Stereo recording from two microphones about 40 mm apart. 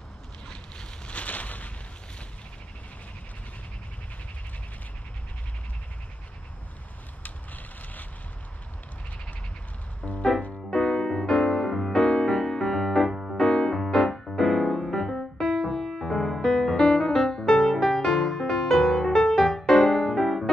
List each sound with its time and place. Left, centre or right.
0.5 s boat: left
1.1 s a sound: left
7.2 s a sound: left
10.0 s music: left
10.7 s music: centre
13.1 s music: centre
13.4 s music: centre